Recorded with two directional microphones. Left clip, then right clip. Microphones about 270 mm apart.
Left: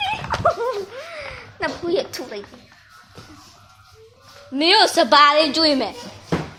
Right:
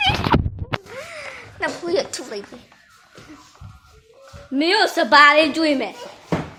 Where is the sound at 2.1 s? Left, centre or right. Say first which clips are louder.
Even; centre.